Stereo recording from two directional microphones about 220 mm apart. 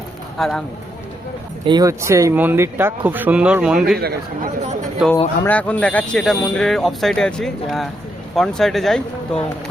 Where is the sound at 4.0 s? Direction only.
45° right (ahead or behind).